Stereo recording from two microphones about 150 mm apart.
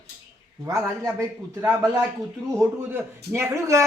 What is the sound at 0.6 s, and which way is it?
Speech, 15° right (ahead or behind).